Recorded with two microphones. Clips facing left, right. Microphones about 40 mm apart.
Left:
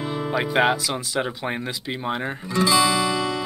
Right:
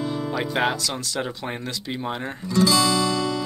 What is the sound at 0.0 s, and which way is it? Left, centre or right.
Speech, left.